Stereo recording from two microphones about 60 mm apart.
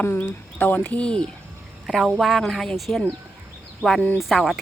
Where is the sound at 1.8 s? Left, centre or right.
Centre.